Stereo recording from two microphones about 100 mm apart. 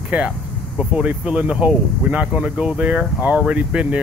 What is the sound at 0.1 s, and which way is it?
Speech, 15° right (ahead or behind).